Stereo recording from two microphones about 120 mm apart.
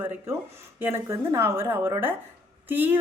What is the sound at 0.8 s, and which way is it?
A woman's voice, 20° right (ahead or behind).